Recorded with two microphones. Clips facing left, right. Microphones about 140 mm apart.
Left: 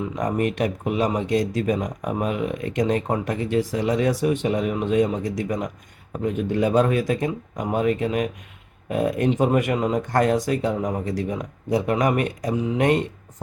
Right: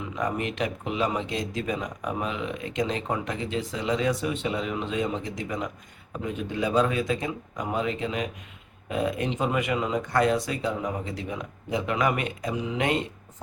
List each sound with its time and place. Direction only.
0.2 s speech: 45° left (ahead or behind)